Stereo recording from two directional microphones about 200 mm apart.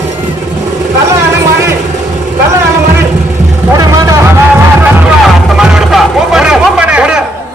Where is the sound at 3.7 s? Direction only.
20° right (ahead or behind).